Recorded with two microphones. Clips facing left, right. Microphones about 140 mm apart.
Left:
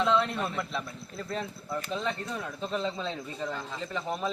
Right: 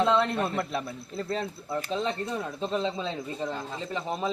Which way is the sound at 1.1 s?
30° right (ahead or behind).